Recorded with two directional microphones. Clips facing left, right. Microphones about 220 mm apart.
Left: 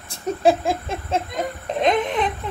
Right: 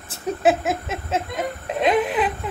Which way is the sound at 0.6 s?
30° left (ahead or behind).